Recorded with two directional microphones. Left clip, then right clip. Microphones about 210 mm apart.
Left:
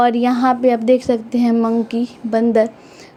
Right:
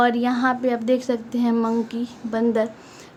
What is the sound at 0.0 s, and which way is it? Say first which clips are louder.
A woman's voice: left 5 dB; 25° left (ahead or behind).